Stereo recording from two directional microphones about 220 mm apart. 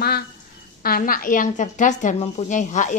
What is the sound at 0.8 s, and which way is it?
A woman's voice, 40° left (ahead or behind).